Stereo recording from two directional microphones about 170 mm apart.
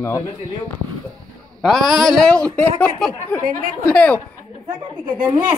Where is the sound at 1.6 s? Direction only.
Centre (ahead or behind).